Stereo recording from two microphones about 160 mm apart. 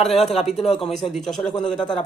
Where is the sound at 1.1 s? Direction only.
Centre (ahead or behind).